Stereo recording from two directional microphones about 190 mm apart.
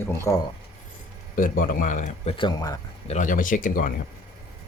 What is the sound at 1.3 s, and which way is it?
Speech, 45° left (ahead or behind).